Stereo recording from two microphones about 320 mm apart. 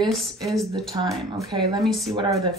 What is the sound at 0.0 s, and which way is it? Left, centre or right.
Speech, centre.